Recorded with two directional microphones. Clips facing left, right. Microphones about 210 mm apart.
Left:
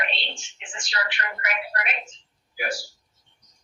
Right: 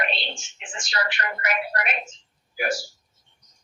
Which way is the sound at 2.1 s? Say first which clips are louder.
Right 4 dB; 45° right (ahead or behind).